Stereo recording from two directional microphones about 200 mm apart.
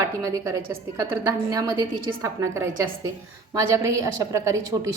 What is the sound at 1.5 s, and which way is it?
A woman's voice, 15° right (ahead or behind).